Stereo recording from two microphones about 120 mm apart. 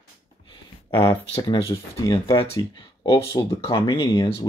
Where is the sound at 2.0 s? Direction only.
35° left (ahead or behind).